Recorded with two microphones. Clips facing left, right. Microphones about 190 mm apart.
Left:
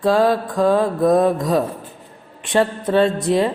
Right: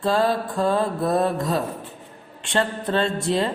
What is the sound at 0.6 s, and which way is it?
Mantra, 5° right (ahead or behind).